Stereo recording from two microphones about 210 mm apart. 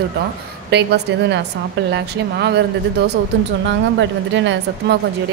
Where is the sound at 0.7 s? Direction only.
55° right (ahead or behind).